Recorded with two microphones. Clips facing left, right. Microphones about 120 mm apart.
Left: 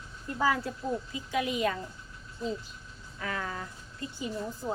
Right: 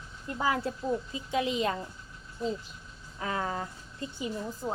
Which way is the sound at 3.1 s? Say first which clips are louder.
Right 3 dB; 25° right (ahead or behind).